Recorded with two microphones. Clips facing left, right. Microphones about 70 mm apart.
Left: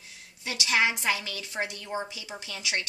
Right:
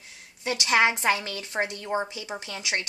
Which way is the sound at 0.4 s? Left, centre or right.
Right.